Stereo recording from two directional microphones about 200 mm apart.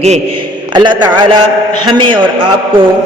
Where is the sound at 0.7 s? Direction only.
20° right (ahead or behind).